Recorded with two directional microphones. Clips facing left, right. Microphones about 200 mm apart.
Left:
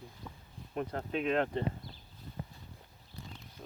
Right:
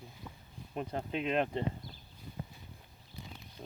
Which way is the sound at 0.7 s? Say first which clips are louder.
Left 1 dB; 20° right (ahead or behind).